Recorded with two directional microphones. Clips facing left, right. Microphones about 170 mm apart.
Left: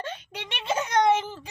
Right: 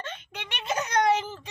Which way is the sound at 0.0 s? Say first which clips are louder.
Left 3 dB; 35° left (ahead or behind).